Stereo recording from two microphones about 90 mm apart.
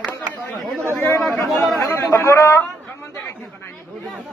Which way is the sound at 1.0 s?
25° left (ahead or behind).